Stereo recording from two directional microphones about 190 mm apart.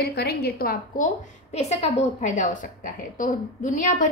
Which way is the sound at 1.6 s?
35° left (ahead or behind).